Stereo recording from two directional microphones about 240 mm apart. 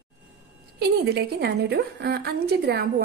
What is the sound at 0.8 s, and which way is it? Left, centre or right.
A woman's voice, right.